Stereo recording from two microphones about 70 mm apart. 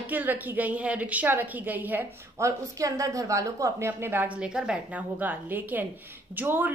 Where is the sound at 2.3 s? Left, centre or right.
Right.